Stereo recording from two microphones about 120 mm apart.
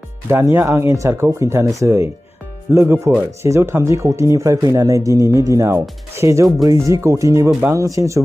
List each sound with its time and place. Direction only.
0.3 s speech: 20° right (ahead or behind)